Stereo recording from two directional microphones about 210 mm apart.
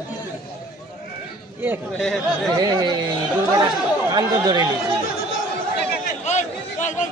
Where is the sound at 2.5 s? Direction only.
20° right (ahead or behind).